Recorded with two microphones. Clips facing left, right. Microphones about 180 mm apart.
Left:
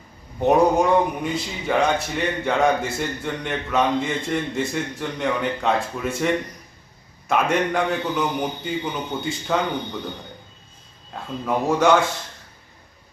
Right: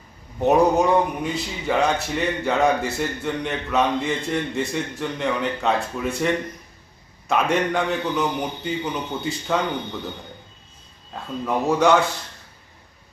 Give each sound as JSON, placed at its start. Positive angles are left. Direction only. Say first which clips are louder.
{"t": 0.3, "sound": "speech", "louder": "even", "side_deg": 0}
{"t": 11.1, "sound": "speech", "louder": "even", "side_deg": 0}